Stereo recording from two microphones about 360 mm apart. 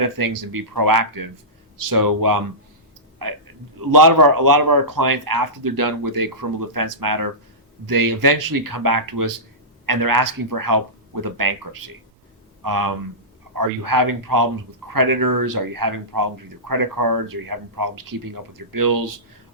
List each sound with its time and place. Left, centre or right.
0.0 s speech: right
12.6 s speech: right